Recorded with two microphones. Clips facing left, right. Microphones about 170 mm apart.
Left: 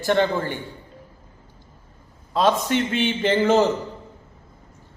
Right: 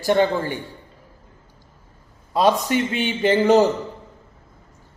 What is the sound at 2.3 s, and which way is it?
A man's voice, 10° right (ahead or behind).